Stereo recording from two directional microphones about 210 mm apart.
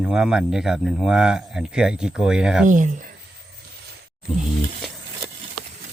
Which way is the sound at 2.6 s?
35° right (ahead or behind).